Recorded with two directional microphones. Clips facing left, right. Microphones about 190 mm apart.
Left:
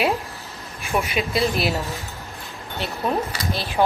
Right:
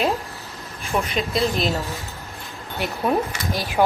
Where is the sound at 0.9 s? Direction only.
5° left (ahead or behind).